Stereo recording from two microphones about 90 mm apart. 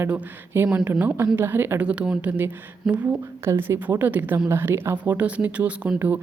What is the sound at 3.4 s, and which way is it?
A woman's voice, 25° right (ahead or behind).